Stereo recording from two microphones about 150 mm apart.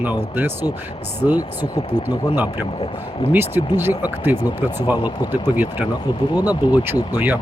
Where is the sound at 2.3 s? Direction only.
15° right (ahead or behind).